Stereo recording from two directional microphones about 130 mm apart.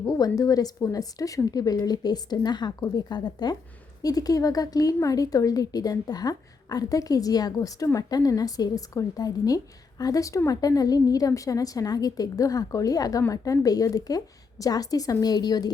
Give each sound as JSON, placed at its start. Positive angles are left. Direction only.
{"t": 0.0, "sound": "a woman's voice", "side_deg": 25}